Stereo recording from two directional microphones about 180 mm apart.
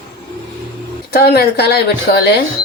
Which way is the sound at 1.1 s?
60° left (ahead or behind).